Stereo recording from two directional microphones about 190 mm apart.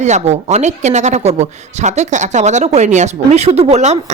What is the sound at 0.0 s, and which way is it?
A woman's voice, 35° right (ahead or behind).